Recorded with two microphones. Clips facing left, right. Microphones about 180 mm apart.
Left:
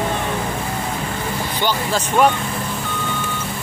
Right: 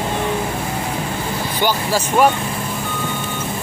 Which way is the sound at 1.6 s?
10° right (ahead or behind).